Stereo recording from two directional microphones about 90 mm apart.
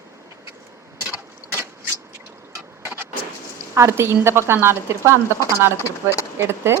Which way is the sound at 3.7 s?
30° right (ahead or behind).